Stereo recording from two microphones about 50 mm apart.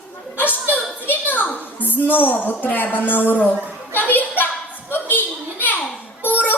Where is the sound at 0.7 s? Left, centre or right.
Left.